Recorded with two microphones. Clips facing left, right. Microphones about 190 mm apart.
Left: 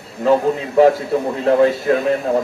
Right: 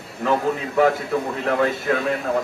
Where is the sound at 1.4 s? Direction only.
25° left (ahead or behind).